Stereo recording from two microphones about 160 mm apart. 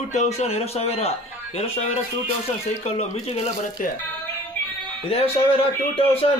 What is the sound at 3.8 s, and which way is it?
Speech, 55° left (ahead or behind).